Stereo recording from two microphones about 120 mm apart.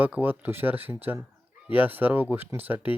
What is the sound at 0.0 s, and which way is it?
Speech, 15° right (ahead or behind).